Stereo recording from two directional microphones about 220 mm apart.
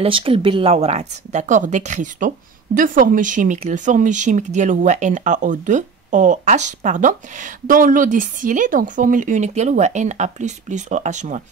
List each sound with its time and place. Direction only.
0.0 s speech: 25° right (ahead or behind)